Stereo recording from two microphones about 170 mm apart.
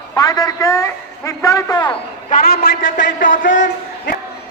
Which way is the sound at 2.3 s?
60° left (ahead or behind).